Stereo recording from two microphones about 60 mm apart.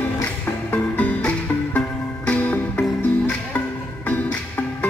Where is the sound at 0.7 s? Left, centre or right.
Left.